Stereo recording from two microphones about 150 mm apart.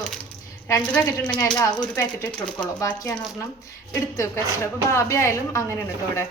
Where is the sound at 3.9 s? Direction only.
15° left (ahead or behind).